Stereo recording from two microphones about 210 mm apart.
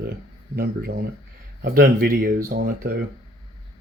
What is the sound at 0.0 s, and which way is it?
Speech, 45° right (ahead or behind).